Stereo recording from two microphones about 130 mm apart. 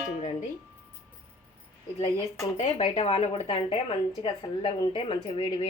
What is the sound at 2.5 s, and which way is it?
A woman's voice, 55° left (ahead or behind).